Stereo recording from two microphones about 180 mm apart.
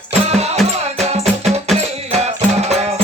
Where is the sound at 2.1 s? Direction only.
35° right (ahead or behind).